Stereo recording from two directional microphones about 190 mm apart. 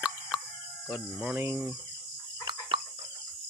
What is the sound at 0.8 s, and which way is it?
Speech, 5° right (ahead or behind).